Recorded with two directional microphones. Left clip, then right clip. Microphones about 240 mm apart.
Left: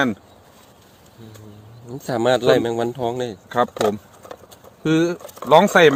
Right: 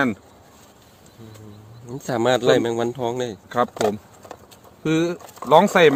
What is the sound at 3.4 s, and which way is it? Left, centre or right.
Speech, left.